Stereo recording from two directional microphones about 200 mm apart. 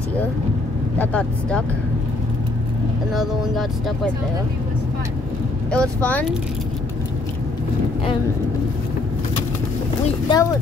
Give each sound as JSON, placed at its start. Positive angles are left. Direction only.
{"t": 0.9, "sound": "speech", "side_deg": 5}
{"t": 3.2, "sound": "speech", "side_deg": 0}
{"t": 5.7, "sound": "speech", "side_deg": 5}
{"t": 10.0, "sound": "speech", "side_deg": 20}